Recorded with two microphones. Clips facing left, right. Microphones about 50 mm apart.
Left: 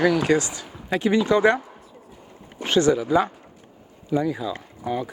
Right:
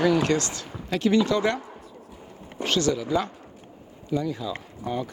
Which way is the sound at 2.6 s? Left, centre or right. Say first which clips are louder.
Left 5 dB; left.